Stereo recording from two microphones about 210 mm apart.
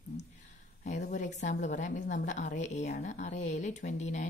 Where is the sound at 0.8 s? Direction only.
35° left (ahead or behind).